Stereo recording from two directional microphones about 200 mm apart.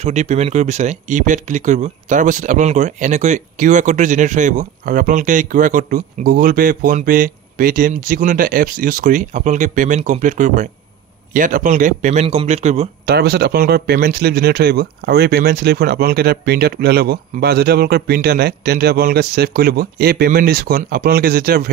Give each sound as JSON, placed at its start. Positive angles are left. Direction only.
{"t": 0.0, "sound": "speech", "side_deg": -35}
{"t": 13.0, "sound": "speech", "side_deg": -55}